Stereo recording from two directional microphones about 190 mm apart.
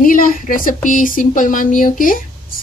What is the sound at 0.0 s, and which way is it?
Speech, 45° left (ahead or behind).